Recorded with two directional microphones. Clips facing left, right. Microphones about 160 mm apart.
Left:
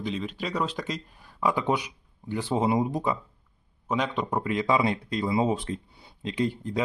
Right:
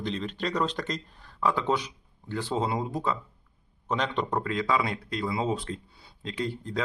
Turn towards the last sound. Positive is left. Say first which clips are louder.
# left 4 dB
turn(degrees=20)  # may be behind; listen again after turning